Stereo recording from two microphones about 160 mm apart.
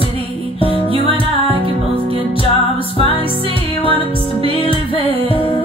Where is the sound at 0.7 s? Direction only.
35° right (ahead or behind).